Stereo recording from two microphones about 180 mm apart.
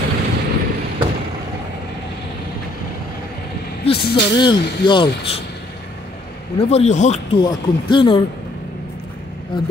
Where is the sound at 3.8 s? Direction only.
35° left (ahead or behind).